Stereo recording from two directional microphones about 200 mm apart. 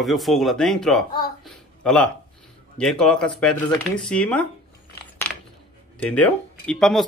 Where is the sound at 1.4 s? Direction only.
5° left (ahead or behind).